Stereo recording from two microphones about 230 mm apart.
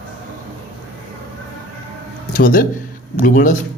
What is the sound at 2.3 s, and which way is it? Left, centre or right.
Speech, left.